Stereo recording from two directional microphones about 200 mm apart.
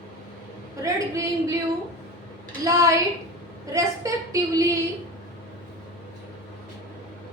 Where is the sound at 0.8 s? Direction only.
15° right (ahead or behind).